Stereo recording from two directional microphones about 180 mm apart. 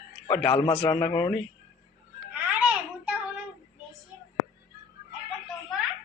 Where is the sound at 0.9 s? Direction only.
10° left (ahead or behind).